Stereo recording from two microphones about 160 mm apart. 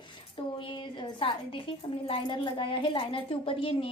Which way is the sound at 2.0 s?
30° left (ahead or behind).